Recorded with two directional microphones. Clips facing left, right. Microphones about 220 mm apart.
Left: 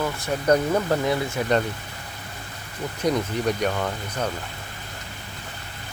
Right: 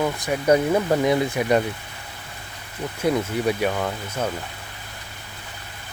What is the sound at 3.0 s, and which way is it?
Speech, 5° right (ahead or behind).